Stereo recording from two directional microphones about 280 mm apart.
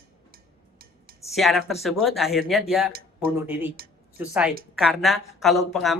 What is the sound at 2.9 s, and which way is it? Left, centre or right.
Speech, right.